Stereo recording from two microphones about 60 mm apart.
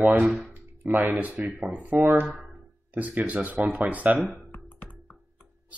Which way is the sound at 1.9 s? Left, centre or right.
Right.